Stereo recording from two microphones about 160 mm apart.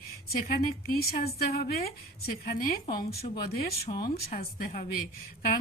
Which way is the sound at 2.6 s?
65° left (ahead or behind).